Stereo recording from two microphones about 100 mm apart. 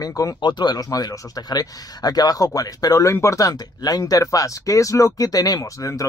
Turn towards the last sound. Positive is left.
turn(degrees=35)  # may be behind; listen again after turning